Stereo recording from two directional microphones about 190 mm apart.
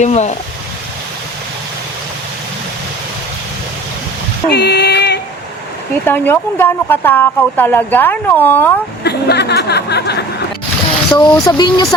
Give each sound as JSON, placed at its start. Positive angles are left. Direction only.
{"t": 0.0, "sound": "speech", "side_deg": 40}
{"t": 4.4, "sound": "speech", "side_deg": 60}
{"t": 6.1, "sound": "a woman's voice", "side_deg": 10}
{"t": 9.0, "sound": "a sound", "side_deg": 60}
{"t": 11.1, "sound": "a woman's voice", "side_deg": 20}